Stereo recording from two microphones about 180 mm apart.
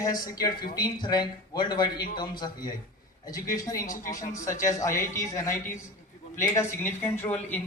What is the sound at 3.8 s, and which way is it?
Speech, 45° left (ahead or behind).